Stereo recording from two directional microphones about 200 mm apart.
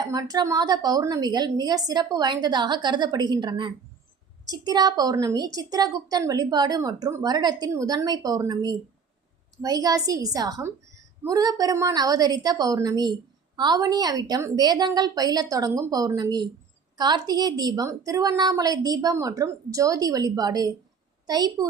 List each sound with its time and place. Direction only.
0.0 s a woman's voice: 20° right (ahead or behind)